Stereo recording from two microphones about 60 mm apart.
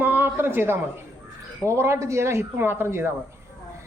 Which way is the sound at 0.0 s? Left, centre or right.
Right.